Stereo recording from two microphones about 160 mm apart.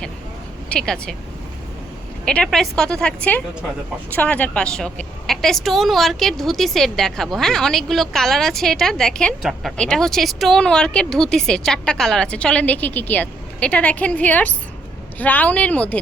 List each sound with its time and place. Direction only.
0.7 s a woman's voice: 5° left (ahead or behind)
2.2 s a woman's voice: 5° left (ahead or behind)